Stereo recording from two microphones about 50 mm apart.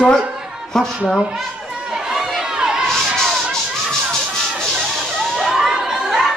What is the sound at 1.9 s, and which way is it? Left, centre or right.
Chatter, centre.